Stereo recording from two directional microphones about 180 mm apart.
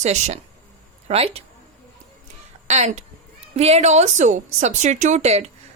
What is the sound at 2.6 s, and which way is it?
A woman's voice, 40° right (ahead or behind).